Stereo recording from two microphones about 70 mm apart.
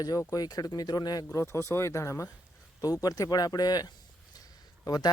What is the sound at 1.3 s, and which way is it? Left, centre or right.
Speech, left.